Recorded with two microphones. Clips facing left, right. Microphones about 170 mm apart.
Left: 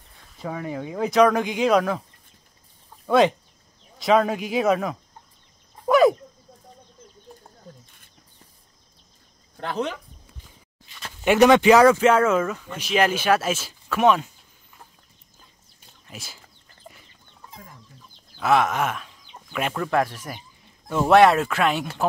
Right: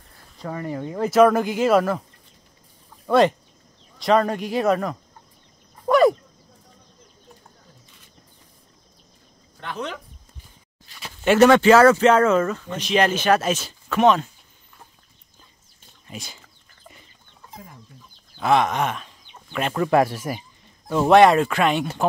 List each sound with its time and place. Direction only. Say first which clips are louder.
0.1 s speech: even; centre (ahead or behind)
3.1 s speech: right 1 dB; centre (ahead or behind)
5.9 s a sound: even; centre (ahead or behind)
11.2 s speech: right 1 dB; 15° left (ahead or behind)
16.1 s speech: right 4 dB; 5° left (ahead or behind)
18.4 s speech: right 1 dB; 5° left (ahead or behind)